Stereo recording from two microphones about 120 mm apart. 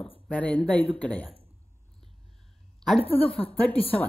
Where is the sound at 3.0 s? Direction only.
50° left (ahead or behind).